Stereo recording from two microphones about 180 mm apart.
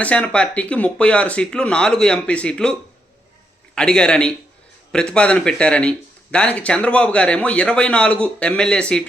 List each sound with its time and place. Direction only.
0.0 s a man's voice: 5° left (ahead or behind)
3.8 s a man's voice: 5° left (ahead or behind)